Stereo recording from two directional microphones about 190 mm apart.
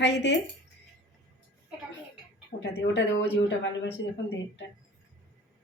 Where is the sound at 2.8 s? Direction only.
70° left (ahead or behind).